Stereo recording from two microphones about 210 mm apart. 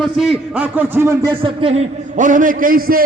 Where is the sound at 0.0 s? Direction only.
Centre (ahead or behind).